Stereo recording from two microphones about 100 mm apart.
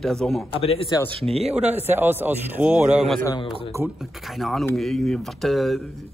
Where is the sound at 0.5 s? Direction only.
70° left (ahead or behind).